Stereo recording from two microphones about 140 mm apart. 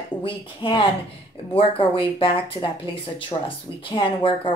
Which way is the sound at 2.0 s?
40° left (ahead or behind).